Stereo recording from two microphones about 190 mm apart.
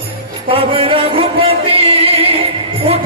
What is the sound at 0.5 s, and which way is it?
Music, 30° right (ahead or behind).